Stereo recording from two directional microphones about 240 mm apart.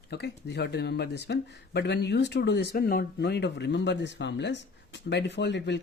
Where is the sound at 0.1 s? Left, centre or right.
Left.